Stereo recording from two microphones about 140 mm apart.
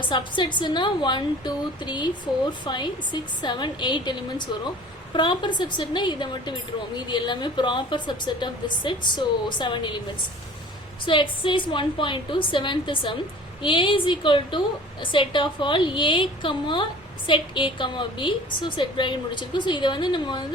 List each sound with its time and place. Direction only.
0.0 s a woman's voice: 35° left (ahead or behind)
11.0 s a woman's voice: 35° left (ahead or behind)